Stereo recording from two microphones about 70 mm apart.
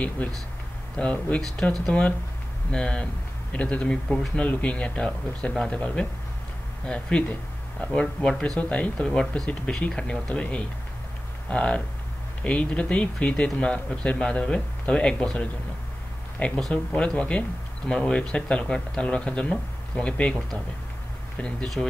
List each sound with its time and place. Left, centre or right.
0.2 s speech: centre
21.4 s speech: centre